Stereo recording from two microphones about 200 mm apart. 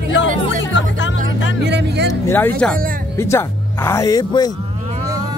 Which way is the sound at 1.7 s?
60° right (ahead or behind).